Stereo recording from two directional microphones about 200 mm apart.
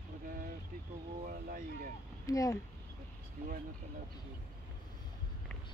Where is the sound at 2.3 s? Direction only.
15° left (ahead or behind).